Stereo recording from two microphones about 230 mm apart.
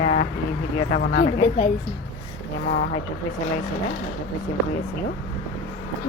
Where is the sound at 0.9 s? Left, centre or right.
Left.